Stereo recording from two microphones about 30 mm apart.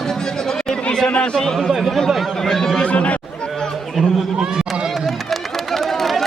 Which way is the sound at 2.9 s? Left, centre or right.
Left.